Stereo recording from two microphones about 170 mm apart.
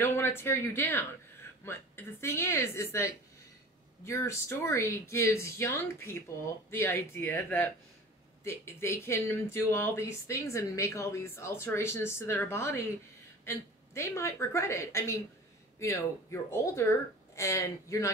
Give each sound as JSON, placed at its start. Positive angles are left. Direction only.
{"t": 0.0, "sound": "speech", "side_deg": 15}